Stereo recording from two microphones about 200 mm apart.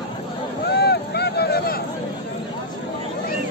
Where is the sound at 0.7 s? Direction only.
55° left (ahead or behind).